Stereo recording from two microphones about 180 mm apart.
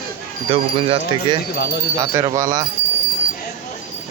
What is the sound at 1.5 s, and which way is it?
Speech, 70° left (ahead or behind).